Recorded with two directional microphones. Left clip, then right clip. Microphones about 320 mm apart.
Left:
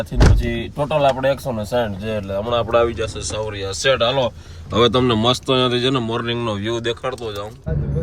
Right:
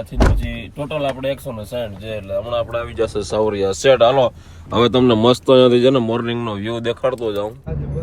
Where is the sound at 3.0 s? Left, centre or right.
Centre.